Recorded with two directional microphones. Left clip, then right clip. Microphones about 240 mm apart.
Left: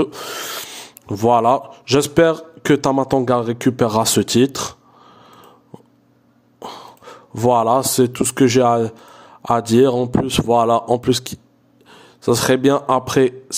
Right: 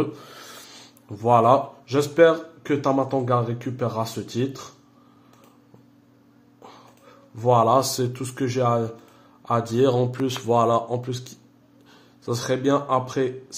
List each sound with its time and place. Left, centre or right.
0.0 s speech: left
6.6 s speech: left
9.9 s speech: left
10.4 s speech: left